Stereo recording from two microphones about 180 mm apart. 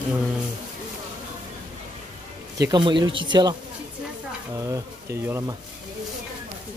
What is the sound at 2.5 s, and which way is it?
Speech, 20° right (ahead or behind).